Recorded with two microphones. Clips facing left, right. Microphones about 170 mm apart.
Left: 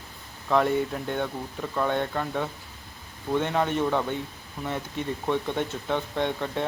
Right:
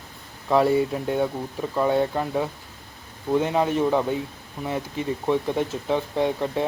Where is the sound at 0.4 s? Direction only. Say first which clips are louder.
Right 4 dB; 10° right (ahead or behind).